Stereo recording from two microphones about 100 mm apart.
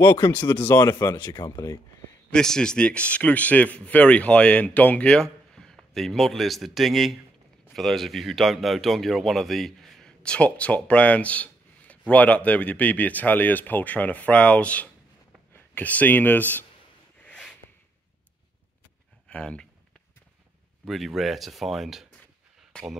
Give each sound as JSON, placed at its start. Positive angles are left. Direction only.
{"t": 0.3, "sound": "speech", "side_deg": 20}
{"t": 0.7, "sound": "speech", "side_deg": 35}
{"t": 2.3, "sound": "speech", "side_deg": 5}
{"t": 17.2, "sound": "a sound", "side_deg": 10}
{"t": 19.2, "sound": "a sound", "side_deg": 10}
{"t": 20.8, "sound": "speech", "side_deg": 0}